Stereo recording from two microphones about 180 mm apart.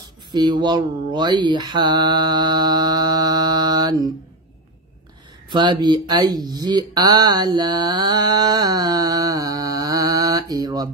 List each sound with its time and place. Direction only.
0.3 s mantra: 25° right (ahead or behind)
5.5 s speech: 25° right (ahead or behind)